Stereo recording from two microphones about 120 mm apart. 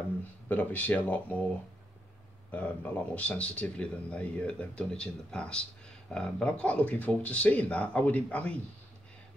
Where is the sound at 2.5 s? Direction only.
10° left (ahead or behind).